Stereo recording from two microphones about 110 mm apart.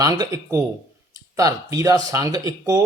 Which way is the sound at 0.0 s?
35° right (ahead or behind).